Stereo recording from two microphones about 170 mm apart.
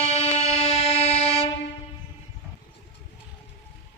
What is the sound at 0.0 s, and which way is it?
Music, 35° left (ahead or behind).